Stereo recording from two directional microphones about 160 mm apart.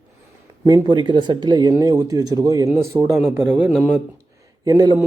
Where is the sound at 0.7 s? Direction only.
25° right (ahead or behind).